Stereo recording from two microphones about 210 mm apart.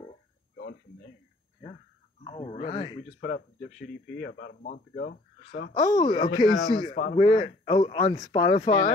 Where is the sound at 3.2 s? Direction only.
45° left (ahead or behind).